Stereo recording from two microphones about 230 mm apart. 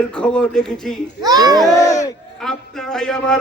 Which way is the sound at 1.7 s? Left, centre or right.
Centre.